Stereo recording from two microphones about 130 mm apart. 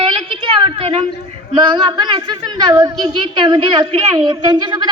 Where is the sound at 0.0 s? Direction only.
40° right (ahead or behind).